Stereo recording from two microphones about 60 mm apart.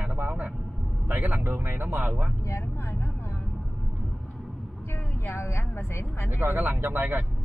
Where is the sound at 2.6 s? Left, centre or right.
Left.